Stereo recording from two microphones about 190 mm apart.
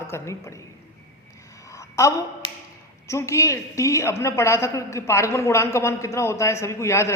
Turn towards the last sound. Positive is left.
turn(degrees=15)  # may be behind; listen again after turning